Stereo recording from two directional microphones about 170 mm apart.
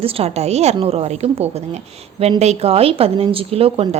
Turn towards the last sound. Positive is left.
turn(degrees=-35)  # may be behind; listen again after turning